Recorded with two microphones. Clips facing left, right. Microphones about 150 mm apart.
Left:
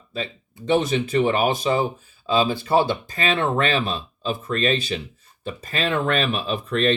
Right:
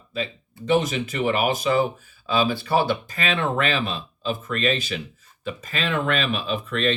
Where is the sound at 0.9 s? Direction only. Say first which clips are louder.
Left 4 dB; 30° left (ahead or behind).